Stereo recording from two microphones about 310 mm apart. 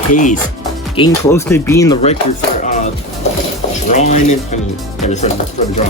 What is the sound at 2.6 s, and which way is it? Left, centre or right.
Music, left.